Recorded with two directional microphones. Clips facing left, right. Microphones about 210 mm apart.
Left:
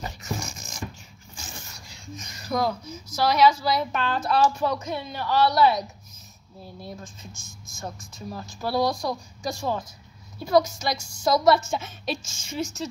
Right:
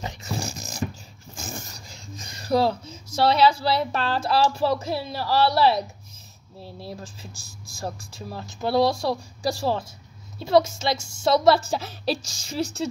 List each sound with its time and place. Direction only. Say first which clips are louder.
0.0 s music: right 2 dB; 30° right (ahead or behind)
1.3 s zipper: right 7 dB; 45° right (ahead or behind)
3.1 s a woman's voice: right 1 dB; 30° right (ahead or behind)